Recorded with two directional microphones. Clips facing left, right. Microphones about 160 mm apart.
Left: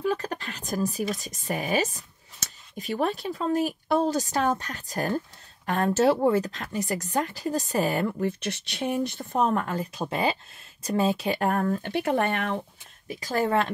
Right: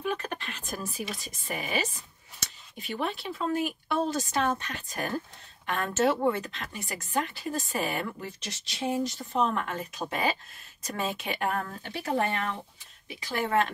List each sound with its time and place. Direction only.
0.0 s speech: 35° left (ahead or behind)
8.3 s speech: 60° left (ahead or behind)
13.1 s speech: 40° left (ahead or behind)